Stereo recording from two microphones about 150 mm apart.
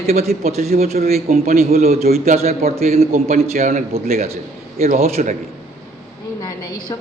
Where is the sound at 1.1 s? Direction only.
45° right (ahead or behind).